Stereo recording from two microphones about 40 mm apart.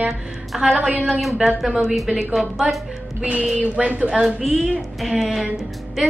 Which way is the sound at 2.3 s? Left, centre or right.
Centre.